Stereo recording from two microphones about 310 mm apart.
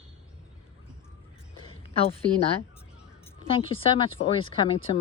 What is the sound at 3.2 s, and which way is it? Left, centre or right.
Speech, centre.